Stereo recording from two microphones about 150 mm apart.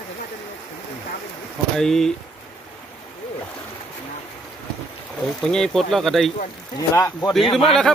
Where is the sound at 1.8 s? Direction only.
5° left (ahead or behind).